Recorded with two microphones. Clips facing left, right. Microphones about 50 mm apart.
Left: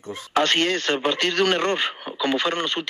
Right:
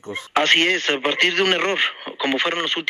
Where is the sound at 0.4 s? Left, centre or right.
Right.